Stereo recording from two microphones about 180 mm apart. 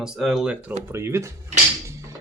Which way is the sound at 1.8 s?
15° right (ahead or behind).